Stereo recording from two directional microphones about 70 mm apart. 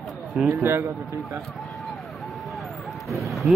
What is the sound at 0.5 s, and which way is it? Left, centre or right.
Speech, right.